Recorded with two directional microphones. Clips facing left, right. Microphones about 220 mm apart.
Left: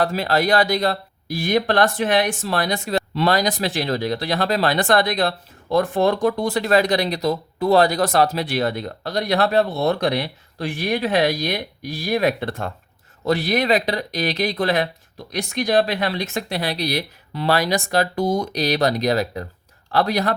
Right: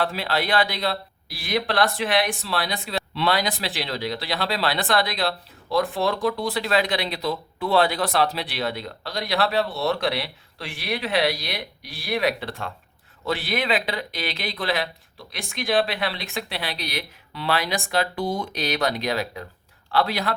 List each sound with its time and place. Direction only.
0.0 s speech: 45° left (ahead or behind)